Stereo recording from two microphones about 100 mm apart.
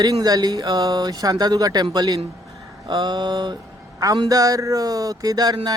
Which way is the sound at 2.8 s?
45° right (ahead or behind).